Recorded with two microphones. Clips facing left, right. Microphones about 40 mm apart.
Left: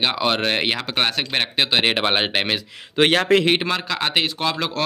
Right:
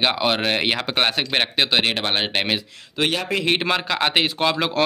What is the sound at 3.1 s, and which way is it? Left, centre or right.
Speech, left.